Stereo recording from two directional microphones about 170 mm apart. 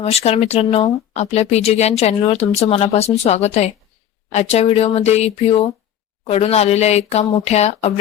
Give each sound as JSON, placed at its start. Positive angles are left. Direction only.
{"t": 0.0, "sound": "speech", "side_deg": 40}